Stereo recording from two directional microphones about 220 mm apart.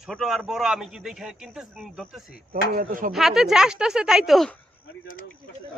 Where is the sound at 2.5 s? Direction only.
40° right (ahead or behind).